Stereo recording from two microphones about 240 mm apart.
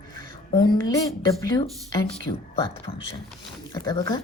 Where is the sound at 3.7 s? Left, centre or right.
Centre.